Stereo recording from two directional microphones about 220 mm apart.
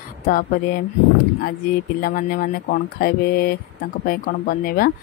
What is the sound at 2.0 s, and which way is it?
Speech, 40° left (ahead or behind).